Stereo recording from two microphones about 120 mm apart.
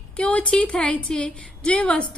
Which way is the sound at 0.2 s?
10° left (ahead or behind).